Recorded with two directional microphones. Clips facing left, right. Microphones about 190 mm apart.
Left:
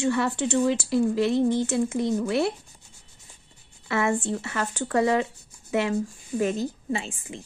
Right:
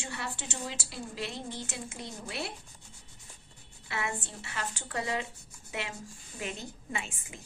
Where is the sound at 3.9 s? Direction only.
50° left (ahead or behind).